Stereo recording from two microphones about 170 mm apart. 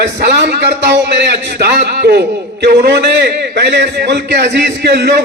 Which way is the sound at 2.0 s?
70° right (ahead or behind).